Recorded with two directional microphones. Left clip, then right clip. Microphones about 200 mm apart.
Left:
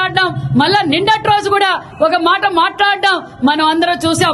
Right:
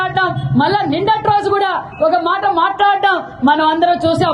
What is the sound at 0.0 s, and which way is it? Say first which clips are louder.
A woman's voice: left 1 dB; 15° left (ahead or behind).